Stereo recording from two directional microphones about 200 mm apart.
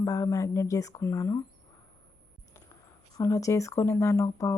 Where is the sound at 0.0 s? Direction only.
15° left (ahead or behind).